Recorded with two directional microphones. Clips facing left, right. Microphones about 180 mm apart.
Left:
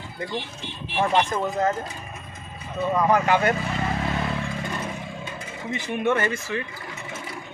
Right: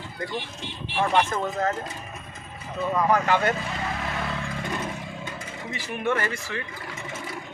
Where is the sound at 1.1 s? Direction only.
15° left (ahead or behind).